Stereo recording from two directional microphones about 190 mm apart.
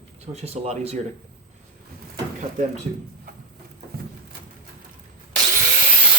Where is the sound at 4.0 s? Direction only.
50° right (ahead or behind).